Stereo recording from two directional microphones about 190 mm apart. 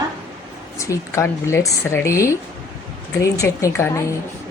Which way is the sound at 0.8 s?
15° left (ahead or behind).